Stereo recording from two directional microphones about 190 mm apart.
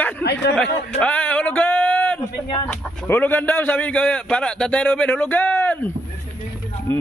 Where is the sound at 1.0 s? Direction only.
5° left (ahead or behind).